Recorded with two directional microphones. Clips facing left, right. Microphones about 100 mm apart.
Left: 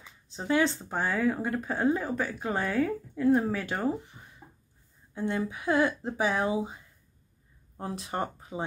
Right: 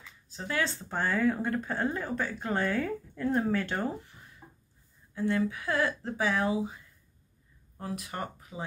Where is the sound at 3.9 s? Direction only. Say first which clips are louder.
Left 6 dB; 20° left (ahead or behind).